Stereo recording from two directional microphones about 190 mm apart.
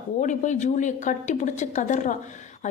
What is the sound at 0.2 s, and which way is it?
Speech, 40° left (ahead or behind).